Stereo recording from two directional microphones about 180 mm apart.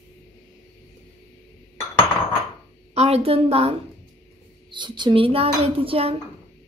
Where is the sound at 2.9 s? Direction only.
35° right (ahead or behind).